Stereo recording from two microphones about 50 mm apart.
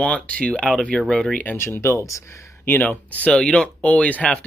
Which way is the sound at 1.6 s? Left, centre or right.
Left.